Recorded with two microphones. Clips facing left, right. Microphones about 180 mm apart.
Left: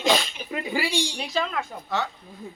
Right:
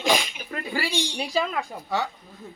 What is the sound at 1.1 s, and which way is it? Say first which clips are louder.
Speech: right 2 dB; 10° right (ahead or behind).